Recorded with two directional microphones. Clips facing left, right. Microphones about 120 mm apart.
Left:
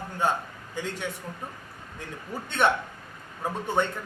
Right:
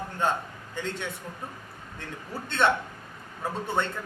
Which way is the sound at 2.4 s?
15° left (ahead or behind).